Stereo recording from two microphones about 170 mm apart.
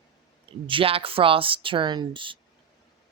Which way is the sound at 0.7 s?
30° right (ahead or behind).